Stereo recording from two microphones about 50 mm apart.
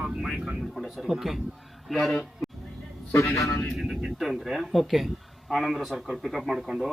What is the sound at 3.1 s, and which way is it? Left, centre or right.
Speech, left.